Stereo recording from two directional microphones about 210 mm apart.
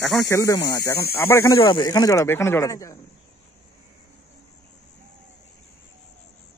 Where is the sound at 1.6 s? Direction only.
20° left (ahead or behind).